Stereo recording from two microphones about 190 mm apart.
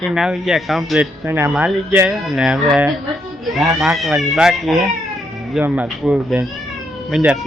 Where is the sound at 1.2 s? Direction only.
15° right (ahead or behind).